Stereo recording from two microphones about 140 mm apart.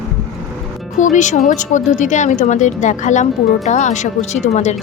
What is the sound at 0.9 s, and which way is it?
A woman's voice, 60° left (ahead or behind).